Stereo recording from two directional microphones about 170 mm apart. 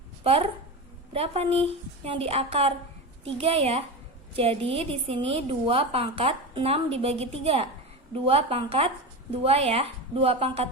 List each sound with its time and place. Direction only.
0.3 s a woman's voice: 35° right (ahead or behind)